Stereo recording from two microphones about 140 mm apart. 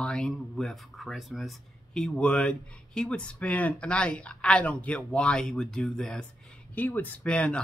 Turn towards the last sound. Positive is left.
turn(degrees=10)  # may be behind; listen again after turning